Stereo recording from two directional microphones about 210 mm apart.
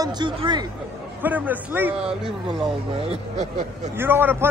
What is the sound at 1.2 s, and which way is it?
Speech, 10° right (ahead or behind).